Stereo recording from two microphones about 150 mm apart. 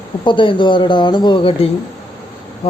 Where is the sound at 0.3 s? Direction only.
35° left (ahead or behind).